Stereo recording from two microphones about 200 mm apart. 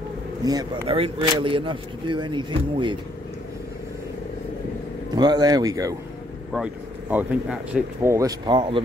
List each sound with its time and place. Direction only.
0.5 s speech: 25° right (ahead or behind)
5.1 s speech: 20° right (ahead or behind)
6.5 s speech: 5° right (ahead or behind); by 8.8 s 25° right (ahead or behind)